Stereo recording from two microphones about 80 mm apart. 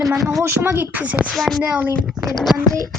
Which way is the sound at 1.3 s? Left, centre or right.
Centre.